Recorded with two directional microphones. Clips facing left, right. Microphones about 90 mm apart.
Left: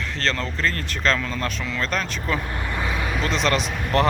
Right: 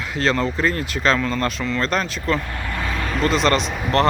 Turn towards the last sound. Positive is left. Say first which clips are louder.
# right 2 dB
turn(degrees=0)  # may be behind; listen again after turning